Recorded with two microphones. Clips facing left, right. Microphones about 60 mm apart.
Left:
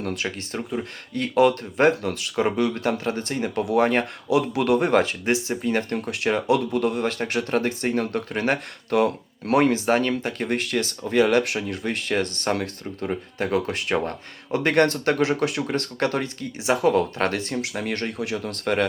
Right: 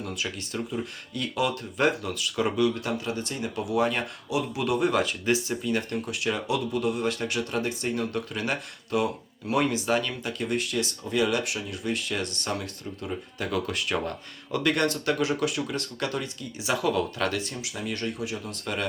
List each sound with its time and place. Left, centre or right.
0.0 s speech: left
16.6 s speech: left